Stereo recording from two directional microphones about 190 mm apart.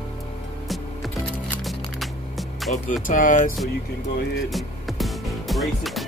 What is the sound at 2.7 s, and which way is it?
Speech, 45° left (ahead or behind).